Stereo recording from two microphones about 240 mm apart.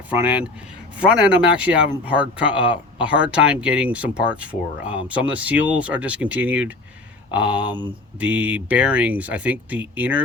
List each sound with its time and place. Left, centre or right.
0.1 s speech: centre